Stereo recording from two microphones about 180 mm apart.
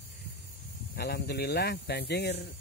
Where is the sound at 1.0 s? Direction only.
65° left (ahead or behind).